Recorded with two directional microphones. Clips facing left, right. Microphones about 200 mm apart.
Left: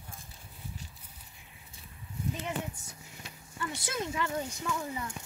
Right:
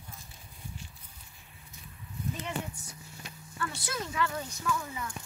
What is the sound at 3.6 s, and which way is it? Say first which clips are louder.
Speech: left 1 dB; 20° left (ahead or behind).